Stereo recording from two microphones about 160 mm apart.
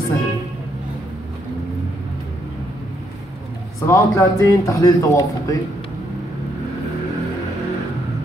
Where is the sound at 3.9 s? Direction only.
20° left (ahead or behind).